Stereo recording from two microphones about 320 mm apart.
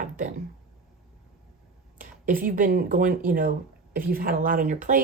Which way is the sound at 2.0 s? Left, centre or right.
Right.